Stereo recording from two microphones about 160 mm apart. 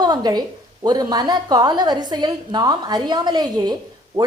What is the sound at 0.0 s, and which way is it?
A woman's voice, 25° right (ahead or behind).